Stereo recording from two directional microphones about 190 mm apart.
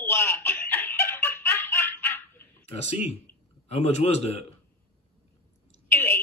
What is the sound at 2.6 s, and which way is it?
A man's voice, 35° left (ahead or behind).